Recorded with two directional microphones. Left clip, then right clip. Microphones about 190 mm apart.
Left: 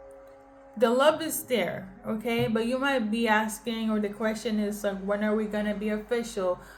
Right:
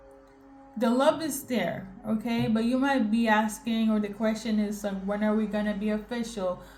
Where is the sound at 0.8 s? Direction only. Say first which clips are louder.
Left 2 dB; 25° left (ahead or behind).